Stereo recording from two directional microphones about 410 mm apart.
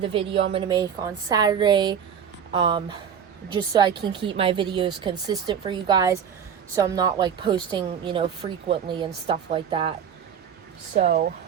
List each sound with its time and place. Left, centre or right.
0.0 s a woman's voice: centre
10.9 s speech: right